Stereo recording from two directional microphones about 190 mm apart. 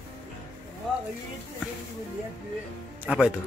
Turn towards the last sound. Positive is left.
turn(degrees=-5)  # may be behind; listen again after turning